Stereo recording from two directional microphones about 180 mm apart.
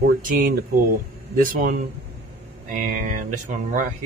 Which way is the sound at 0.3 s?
50° right (ahead or behind).